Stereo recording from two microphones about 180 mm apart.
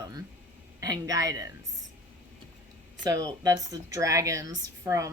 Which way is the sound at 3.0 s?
20° right (ahead or behind).